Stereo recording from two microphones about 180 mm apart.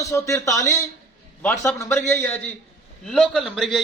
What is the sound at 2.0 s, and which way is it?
A man's voice, 10° left (ahead or behind).